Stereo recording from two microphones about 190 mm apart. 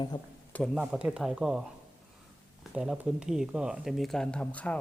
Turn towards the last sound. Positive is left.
turn(degrees=5)  # may be behind; listen again after turning